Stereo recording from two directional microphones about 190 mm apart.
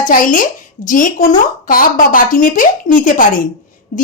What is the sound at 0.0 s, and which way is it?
A woman's voice, 45° left (ahead or behind).